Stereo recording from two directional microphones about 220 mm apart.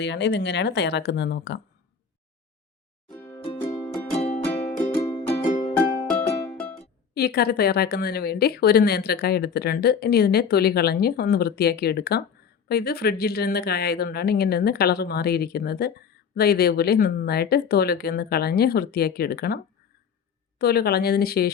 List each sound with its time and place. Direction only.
0.0 s speech: 50° left (ahead or behind)
3.1 s music: 10° left (ahead or behind)
4.2 s music: 30° left (ahead or behind)
4.8 s music: 15° left (ahead or behind)
5.3 s music: 35° left (ahead or behind)
5.7 s music: 10° left (ahead or behind)
7.1 s speech: 45° left (ahead or behind)
20.6 s speech: 45° left (ahead or behind)